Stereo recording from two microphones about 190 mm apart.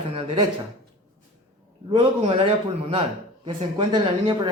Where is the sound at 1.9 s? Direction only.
30° right (ahead or behind).